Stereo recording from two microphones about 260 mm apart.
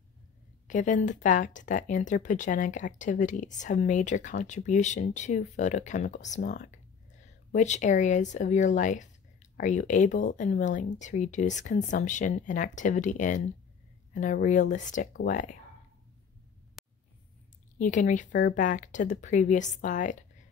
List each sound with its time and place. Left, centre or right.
0.7 s speech: left
16.8 s a sound: centre
17.7 s speech: left